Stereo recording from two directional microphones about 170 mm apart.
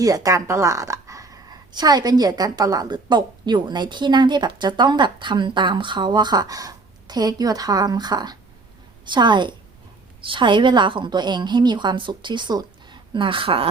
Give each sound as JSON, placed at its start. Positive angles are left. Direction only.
{"t": 0.0, "sound": "speech", "side_deg": -20}